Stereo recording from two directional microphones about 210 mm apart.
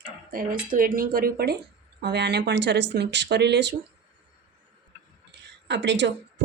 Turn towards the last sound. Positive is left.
turn(degrees=-60)  # may be behind; listen again after turning